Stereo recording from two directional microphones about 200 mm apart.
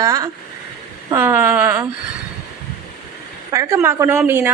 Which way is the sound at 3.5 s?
15° right (ahead or behind).